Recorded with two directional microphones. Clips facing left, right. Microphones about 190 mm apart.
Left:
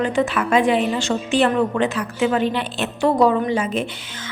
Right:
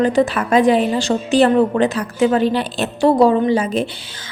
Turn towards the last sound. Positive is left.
turn(degrees=-35)  # may be behind; listen again after turning